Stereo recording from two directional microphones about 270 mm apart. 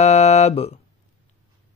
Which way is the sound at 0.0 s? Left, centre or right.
Left.